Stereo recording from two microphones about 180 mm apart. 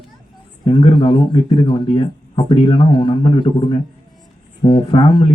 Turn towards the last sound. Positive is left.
turn(degrees=30)  # may be behind; listen again after turning